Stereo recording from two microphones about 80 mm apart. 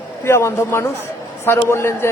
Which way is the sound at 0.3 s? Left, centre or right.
Left.